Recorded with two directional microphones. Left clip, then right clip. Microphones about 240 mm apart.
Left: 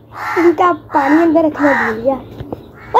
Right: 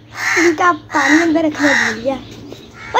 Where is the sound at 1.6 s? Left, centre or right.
Right.